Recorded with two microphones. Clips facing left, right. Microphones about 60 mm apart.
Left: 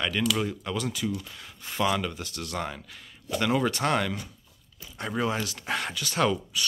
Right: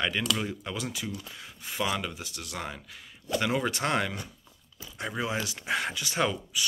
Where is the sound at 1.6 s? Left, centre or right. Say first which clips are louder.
Left 4 dB; centre.